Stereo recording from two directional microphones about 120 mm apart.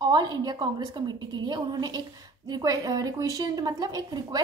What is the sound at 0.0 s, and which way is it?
A woman's voice, 35° right (ahead or behind).